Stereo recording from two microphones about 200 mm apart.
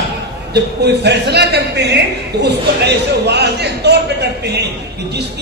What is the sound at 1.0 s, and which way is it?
A man's voice, 55° right (ahead or behind).